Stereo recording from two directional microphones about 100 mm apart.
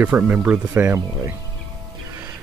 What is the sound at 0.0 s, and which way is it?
Speech, 15° right (ahead or behind).